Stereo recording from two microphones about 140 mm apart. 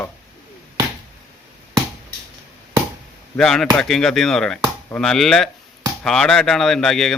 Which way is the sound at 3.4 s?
5° left (ahead or behind).